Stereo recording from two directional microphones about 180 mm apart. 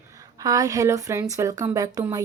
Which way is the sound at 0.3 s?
20° right (ahead or behind).